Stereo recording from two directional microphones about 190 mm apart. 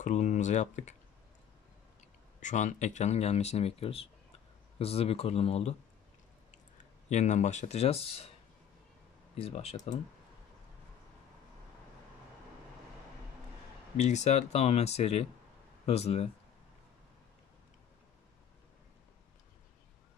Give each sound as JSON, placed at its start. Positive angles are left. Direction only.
{"t": 0.0, "sound": "speech", "side_deg": 40}
{"t": 2.4, "sound": "speech", "side_deg": 40}
{"t": 6.8, "sound": "speech", "side_deg": 35}
{"t": 9.4, "sound": "speech", "side_deg": 30}
{"t": 13.9, "sound": "speech", "side_deg": 35}